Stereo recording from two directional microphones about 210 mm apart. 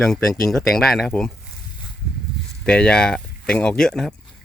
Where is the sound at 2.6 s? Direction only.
5° left (ahead or behind).